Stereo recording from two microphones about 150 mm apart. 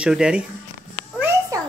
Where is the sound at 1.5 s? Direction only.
20° right (ahead or behind).